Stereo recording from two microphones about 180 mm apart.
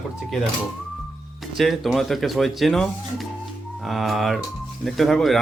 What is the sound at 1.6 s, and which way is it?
Speech, centre (ahead or behind).